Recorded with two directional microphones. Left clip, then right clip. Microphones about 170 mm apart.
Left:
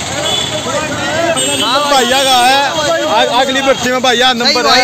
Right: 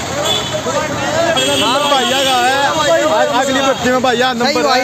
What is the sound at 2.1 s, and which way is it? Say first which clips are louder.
Speech: left 4 dB; 30° left (ahead or behind).